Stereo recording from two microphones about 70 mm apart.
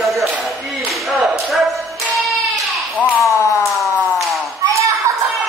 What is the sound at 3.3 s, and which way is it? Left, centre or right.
Siren, left.